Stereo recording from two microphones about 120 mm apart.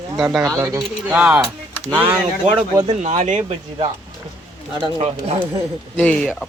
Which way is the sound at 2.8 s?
75° right (ahead or behind).